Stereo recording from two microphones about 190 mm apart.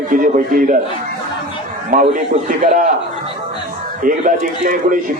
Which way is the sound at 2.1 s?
45° right (ahead or behind).